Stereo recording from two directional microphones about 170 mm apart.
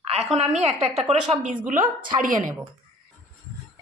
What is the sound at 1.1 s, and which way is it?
A woman's voice, 40° right (ahead or behind).